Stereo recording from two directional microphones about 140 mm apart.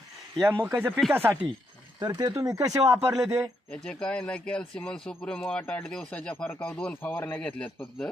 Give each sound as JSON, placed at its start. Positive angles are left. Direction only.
{"t": 0.4, "sound": "speech", "side_deg": -15}
{"t": 2.0, "sound": "speech", "side_deg": -25}
{"t": 3.7, "sound": "speech", "side_deg": 5}